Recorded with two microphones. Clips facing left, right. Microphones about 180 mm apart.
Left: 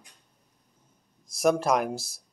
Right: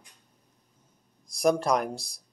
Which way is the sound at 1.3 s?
Centre (ahead or behind).